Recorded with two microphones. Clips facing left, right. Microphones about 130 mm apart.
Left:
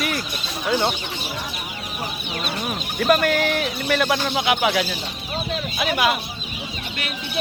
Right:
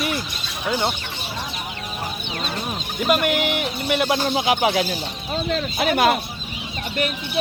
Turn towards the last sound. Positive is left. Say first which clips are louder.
# right 3 dB
turn(degrees=-50)  # may be behind; listen again after turning